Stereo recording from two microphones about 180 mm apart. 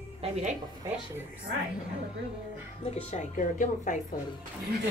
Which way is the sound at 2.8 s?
35° left (ahead or behind).